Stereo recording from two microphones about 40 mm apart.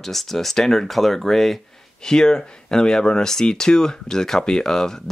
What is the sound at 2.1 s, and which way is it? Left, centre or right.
Speech, centre.